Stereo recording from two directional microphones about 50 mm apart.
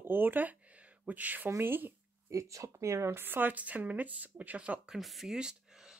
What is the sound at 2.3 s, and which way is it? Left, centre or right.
Speech, right.